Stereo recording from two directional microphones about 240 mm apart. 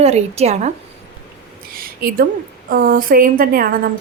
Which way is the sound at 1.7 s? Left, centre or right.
Right.